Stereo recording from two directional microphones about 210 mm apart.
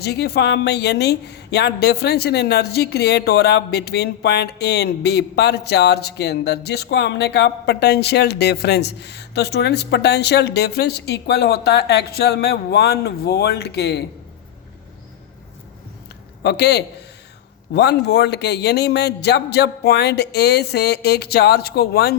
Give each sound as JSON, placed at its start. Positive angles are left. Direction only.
{"t": 0.0, "sound": "speech", "side_deg": 50}
{"t": 16.4, "sound": "speech", "side_deg": 50}